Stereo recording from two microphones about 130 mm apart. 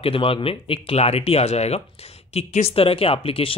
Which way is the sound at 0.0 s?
45° left (ahead or behind).